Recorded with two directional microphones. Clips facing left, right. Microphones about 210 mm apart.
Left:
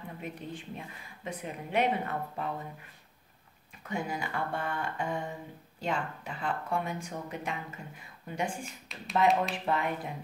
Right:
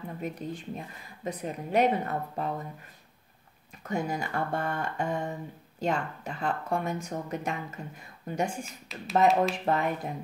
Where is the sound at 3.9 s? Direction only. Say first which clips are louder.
Right 4 dB; 45° right (ahead or behind).